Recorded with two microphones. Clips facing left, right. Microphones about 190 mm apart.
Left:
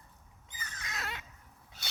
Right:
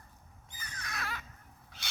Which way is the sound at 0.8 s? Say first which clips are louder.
Right 1 dB; 20° left (ahead or behind).